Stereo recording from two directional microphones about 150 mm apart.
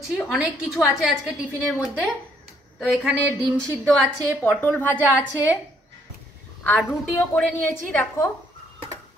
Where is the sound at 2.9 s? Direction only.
10° right (ahead or behind).